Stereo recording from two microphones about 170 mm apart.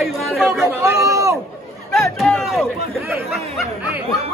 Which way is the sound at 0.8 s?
15° right (ahead or behind).